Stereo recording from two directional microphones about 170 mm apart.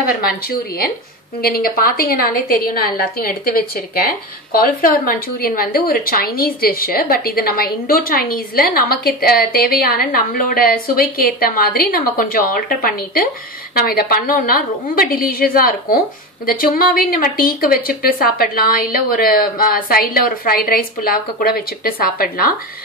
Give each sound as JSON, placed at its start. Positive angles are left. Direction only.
{"t": 0.0, "sound": "a woman's voice", "side_deg": 60}